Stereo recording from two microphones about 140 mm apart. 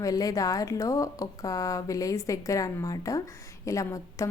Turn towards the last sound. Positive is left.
turn(degrees=20)  # may be behind; listen again after turning